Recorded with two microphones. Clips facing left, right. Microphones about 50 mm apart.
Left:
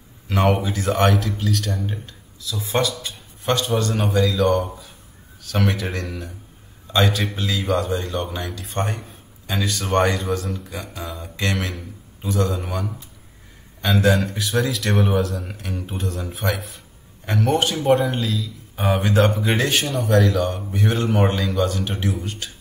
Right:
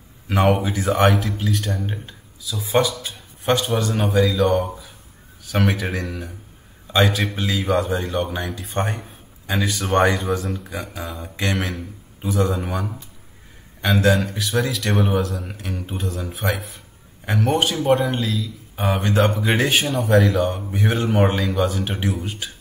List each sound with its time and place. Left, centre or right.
0.6 s a man's voice: centre
2.8 s a man's voice: centre
11.2 s mantra: centre
12.2 s a man's voice: centre